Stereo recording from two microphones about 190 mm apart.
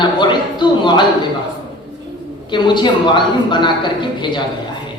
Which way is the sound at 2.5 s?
25° left (ahead or behind).